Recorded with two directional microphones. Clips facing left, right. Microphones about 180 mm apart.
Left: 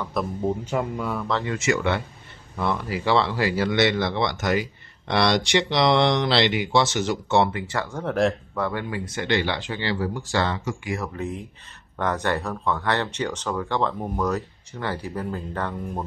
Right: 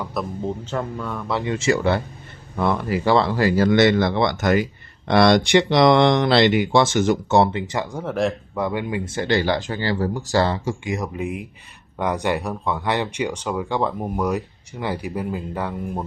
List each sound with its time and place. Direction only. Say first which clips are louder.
0.0 s speech: even; centre (ahead or behind)
0.7 s speech: left 1 dB; 10° left (ahead or behind)
1.4 s speech: right 7 dB; 25° right (ahead or behind)
2.5 s speech: right 5 dB; 50° right (ahead or behind)
7.5 s speech: right 3 dB; 15° right (ahead or behind)
8.0 s speech: left 1 dB; centre (ahead or behind)
8.5 s speech: right 3 dB; 15° right (ahead or behind)